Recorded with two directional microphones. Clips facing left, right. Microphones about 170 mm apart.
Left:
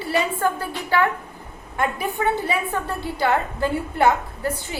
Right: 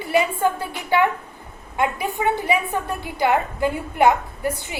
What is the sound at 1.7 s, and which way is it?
A woman's voice, 15° right (ahead or behind).